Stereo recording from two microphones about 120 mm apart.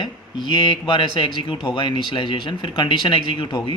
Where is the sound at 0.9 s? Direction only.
40° left (ahead or behind).